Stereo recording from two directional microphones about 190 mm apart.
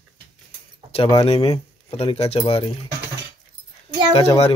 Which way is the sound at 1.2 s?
30° left (ahead or behind).